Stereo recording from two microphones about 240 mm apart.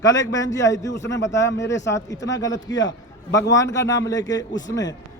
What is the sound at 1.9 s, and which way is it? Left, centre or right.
Speech, centre.